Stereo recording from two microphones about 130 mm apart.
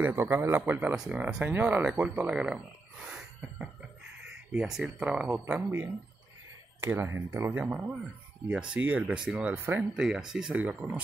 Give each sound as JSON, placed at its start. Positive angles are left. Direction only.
{"t": 0.0, "sound": "speech", "side_deg": -15}
{"t": 3.1, "sound": "a sound", "side_deg": -5}
{"t": 4.6, "sound": "speech", "side_deg": -5}